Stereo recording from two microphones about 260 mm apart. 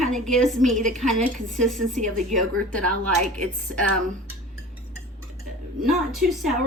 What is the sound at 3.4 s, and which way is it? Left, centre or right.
Speech, right.